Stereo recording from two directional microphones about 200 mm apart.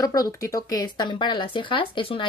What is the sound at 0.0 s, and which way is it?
A woman's voice, 20° left (ahead or behind).